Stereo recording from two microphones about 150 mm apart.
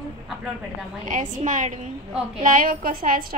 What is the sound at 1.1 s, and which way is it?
Speech, 55° right (ahead or behind).